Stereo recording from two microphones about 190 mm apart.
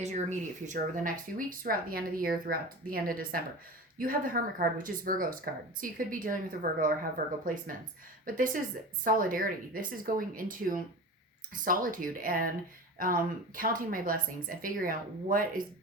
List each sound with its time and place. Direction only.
0.0 s speech: 40° right (ahead or behind)